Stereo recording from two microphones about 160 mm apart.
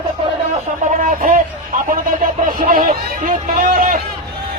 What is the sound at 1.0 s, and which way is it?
Speech, 55° right (ahead or behind).